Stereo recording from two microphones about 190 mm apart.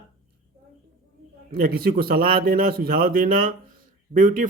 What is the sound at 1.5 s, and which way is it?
Speech, 50° right (ahead or behind).